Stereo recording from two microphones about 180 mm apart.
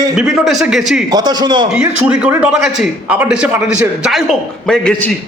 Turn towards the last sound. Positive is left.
turn(degrees=0)  # may be behind; listen again after turning